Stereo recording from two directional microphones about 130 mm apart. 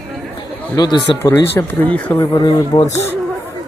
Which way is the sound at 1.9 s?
15° left (ahead or behind).